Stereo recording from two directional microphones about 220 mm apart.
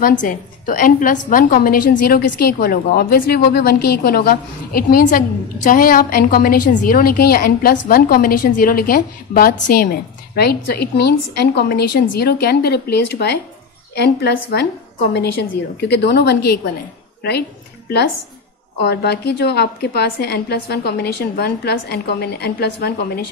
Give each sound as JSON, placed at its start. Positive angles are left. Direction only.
{"t": 0.0, "sound": "a woman's voice", "side_deg": 35}
{"t": 15.8, "sound": "a woman's voice", "side_deg": 50}
{"t": 18.9, "sound": "a woman's voice", "side_deg": 50}